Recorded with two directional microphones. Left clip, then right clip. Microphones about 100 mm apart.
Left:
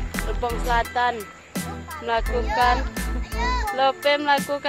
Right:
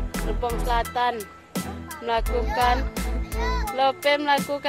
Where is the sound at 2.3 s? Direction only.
25° right (ahead or behind).